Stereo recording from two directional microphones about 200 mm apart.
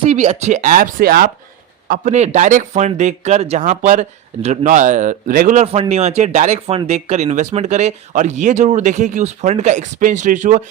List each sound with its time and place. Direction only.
0.1 s speech: 35° right (ahead or behind)
1.9 s speech: 35° right (ahead or behind)
5.6 s speech: 30° right (ahead or behind)